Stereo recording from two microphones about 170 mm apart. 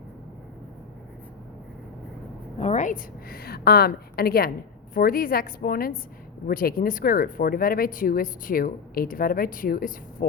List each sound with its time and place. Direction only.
2.6 s a woman's voice: 40° left (ahead or behind)